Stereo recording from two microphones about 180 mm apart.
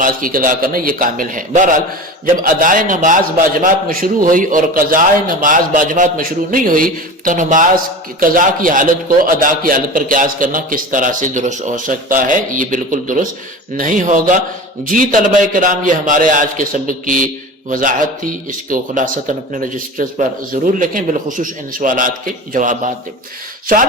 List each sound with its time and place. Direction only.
0.0 s a man's voice: 50° right (ahead or behind)